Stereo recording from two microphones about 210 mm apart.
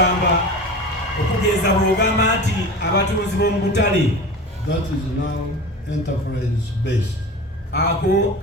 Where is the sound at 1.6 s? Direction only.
55° left (ahead or behind).